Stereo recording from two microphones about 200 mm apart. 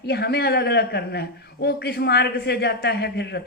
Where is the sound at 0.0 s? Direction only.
55° left (ahead or behind).